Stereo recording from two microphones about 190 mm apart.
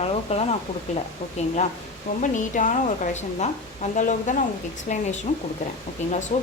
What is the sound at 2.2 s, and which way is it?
A woman's voice, 40° left (ahead or behind).